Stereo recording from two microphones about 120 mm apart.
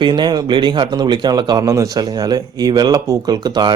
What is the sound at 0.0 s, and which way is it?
Speech, 40° right (ahead or behind).